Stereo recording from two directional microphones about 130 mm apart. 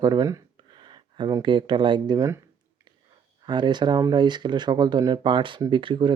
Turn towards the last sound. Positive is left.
turn(degrees=-40)  # may be behind; listen again after turning